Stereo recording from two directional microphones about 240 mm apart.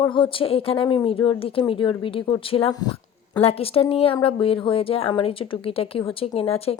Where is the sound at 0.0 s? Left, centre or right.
Centre.